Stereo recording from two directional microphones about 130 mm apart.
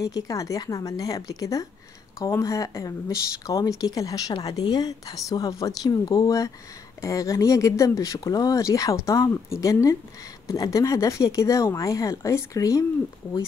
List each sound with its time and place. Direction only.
0.0 s speech: 25° left (ahead or behind)